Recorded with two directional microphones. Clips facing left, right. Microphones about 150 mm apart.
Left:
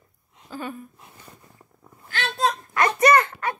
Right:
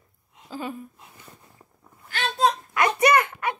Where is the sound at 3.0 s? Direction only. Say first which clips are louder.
Left 3 dB; 15° right (ahead or behind).